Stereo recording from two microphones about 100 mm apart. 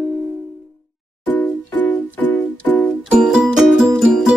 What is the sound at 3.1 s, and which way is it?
Music, 5° right (ahead or behind).